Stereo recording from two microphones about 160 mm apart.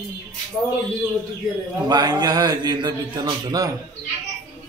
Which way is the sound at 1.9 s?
25° right (ahead or behind).